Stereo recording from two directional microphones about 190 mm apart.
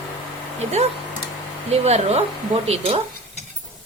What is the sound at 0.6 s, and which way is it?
Speech, 35° right (ahead or behind).